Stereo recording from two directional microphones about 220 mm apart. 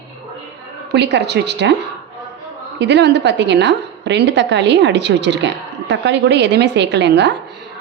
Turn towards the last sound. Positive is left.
turn(degrees=-50)  # may be behind; listen again after turning